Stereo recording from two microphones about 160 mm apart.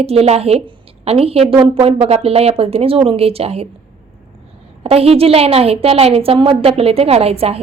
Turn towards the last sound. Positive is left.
turn(degrees=-40)  # may be behind; listen again after turning